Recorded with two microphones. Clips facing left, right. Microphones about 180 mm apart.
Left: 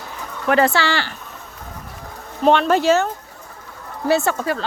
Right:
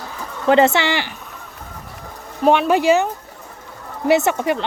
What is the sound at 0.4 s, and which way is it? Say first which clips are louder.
Speech: right 3 dB; 25° right (ahead or behind).